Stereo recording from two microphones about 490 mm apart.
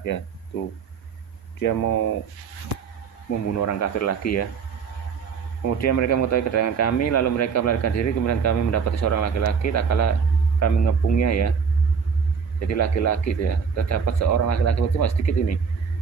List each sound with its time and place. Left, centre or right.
1.6 s speech: left
3.5 s speech: left
5.7 s speech: left
12.5 s speech: left